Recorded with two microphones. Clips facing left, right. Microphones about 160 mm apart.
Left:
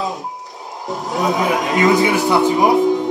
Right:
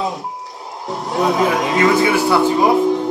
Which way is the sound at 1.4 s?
20° left (ahead or behind).